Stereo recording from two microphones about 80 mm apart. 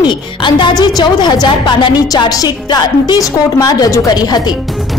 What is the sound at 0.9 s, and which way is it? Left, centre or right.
A woman's voice, left.